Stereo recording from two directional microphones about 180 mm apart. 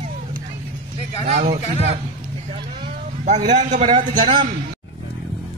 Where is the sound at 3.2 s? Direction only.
40° right (ahead or behind).